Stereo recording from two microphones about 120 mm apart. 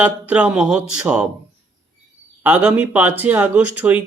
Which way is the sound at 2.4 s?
15° right (ahead or behind).